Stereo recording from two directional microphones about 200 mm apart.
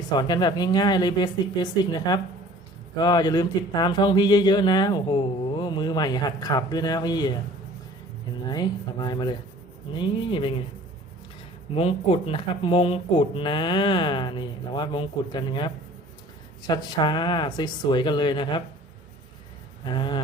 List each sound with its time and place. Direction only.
0.2 s speech: 20° left (ahead or behind)
8.4 s speech: 20° left (ahead or behind)
11.7 s speech: 25° left (ahead or behind)
19.8 s speech: 25° left (ahead or behind)